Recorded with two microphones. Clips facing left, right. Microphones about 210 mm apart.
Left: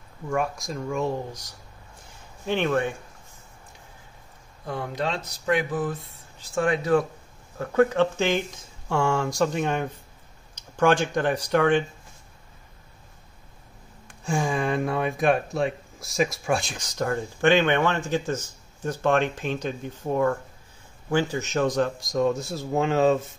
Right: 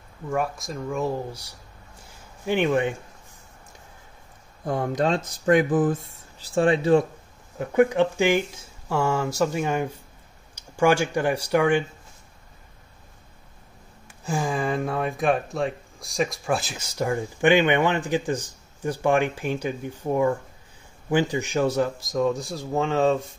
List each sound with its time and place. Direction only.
0.3 s speech: centre (ahead or behind); by 3.0 s 15° right (ahead or behind)
4.6 s speech: 45° right (ahead or behind)
6.5 s speech: 30° right (ahead or behind)
7.5 s speech: 15° right (ahead or behind)
14.0 s speech: 5° right (ahead or behind)